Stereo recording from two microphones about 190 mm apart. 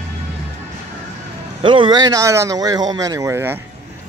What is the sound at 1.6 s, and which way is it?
Speech, 25° right (ahead or behind).